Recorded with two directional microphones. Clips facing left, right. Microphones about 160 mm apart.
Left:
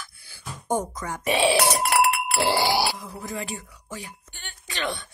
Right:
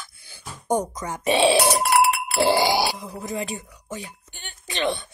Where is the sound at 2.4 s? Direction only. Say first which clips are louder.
Right 3 dB; 15° right (ahead or behind).